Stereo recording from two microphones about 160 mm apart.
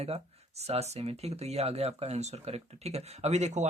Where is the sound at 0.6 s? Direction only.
40° right (ahead or behind).